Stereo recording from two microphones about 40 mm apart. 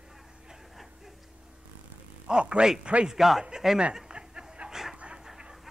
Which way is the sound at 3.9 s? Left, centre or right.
Centre.